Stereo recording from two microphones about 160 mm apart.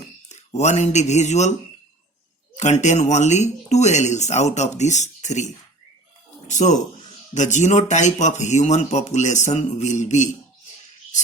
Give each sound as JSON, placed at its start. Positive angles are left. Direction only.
{"t": 0.3, "sound": "speech", "side_deg": 45}
{"t": 2.6, "sound": "speech", "side_deg": 45}
{"t": 6.5, "sound": "speech", "side_deg": 50}